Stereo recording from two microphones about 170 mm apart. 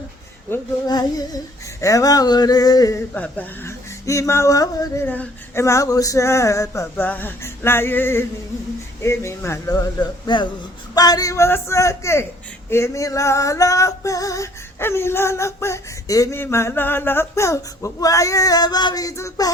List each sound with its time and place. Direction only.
0.9 s speech: 25° left (ahead or behind)
3.2 s female singing: 10° left (ahead or behind)
9.0 s speech: 15° left (ahead or behind)
10.9 s female singing: 20° left (ahead or behind)